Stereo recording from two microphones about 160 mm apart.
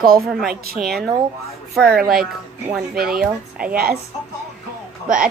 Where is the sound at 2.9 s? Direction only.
65° right (ahead or behind).